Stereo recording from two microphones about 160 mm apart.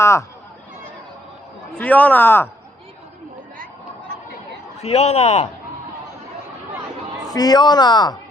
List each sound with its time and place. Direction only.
0.0 s speech: 15° left (ahead or behind)
1.7 s speech: 10° left (ahead or behind)
4.8 s a man's voice: 45° left (ahead or behind)
7.3 s a man's voice: 25° left (ahead or behind)